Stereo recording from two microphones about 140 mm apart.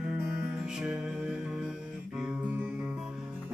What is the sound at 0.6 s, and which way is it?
Music, 5° right (ahead or behind).